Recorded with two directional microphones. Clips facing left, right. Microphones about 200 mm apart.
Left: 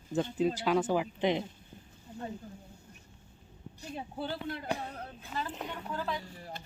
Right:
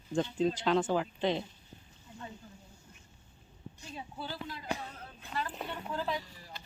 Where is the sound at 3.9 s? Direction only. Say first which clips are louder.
Left 4 dB; 55° left (ahead or behind).